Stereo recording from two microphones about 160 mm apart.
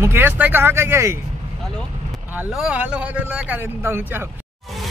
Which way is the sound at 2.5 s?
5° right (ahead or behind).